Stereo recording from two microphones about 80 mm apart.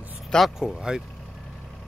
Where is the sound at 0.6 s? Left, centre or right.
Centre.